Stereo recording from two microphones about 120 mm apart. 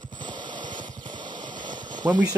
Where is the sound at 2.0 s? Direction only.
25° right (ahead or behind).